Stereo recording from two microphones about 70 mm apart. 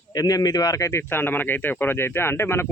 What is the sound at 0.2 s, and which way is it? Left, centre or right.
Speech, left.